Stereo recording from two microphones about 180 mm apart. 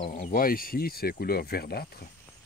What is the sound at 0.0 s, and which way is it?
Speech, 50° left (ahead or behind).